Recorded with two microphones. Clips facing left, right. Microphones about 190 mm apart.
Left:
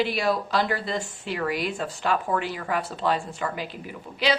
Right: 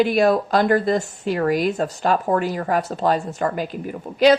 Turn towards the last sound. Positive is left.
turn(degrees=-45)  # may be behind; listen again after turning